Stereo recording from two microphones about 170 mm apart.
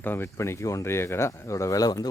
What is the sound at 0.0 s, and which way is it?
Speech, 15° left (ahead or behind).